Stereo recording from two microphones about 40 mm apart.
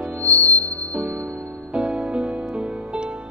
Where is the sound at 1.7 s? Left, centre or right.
Right.